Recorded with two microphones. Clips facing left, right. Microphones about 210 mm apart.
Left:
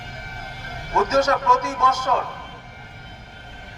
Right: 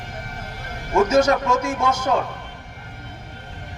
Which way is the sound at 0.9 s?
10° right (ahead or behind).